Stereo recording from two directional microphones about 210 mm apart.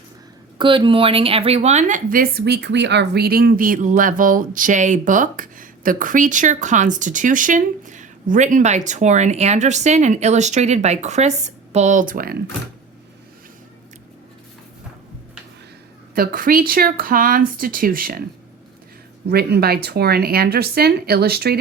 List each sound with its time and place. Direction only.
0.6 s a woman's voice: 25° right (ahead or behind); by 12.4 s 45° right (ahead or behind)
16.1 s speech: 45° right (ahead or behind)
19.3 s speech: 50° right (ahead or behind)